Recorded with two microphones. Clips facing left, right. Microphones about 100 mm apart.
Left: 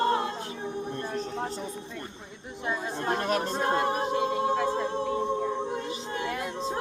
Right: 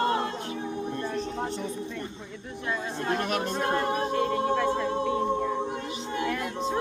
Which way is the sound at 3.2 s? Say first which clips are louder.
Left 1 dB; 35° left (ahead or behind).